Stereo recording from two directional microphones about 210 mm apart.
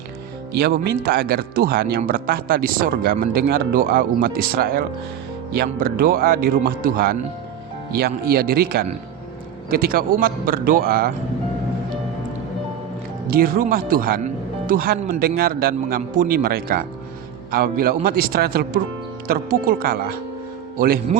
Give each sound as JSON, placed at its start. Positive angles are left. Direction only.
{"t": 0.5, "sound": "speech", "side_deg": -50}
{"t": 13.3, "sound": "speech", "side_deg": -45}